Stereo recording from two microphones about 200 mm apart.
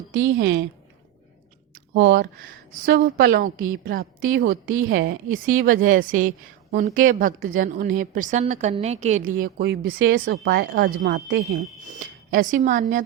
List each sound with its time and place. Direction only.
0.1 s a woman's voice: 70° right (ahead or behind)
1.9 s speech: 60° right (ahead or behind)
2.4 s a woman's voice: 45° right (ahead or behind)
4.7 s a woman's voice: 80° right
4.9 s a woman's voice: 45° right (ahead or behind)
9.4 s a woman's voice: 50° right (ahead or behind)